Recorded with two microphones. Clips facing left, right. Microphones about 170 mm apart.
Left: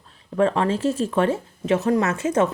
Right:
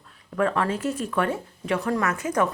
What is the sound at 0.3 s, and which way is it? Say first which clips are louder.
Speech: left 4 dB; 25° left (ahead or behind).